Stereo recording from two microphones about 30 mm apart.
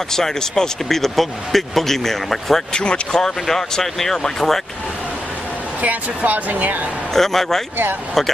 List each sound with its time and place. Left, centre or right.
0.1 s speech: centre
2.7 s speech: left
3.1 s speech: left
5.8 s speech: right
7.2 s speech: centre